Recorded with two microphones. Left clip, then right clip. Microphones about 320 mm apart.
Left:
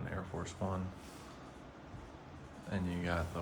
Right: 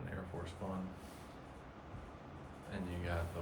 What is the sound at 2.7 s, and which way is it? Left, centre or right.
Speech, centre.